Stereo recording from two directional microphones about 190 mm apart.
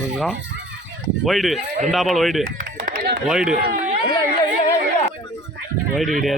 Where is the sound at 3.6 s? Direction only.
45° right (ahead or behind).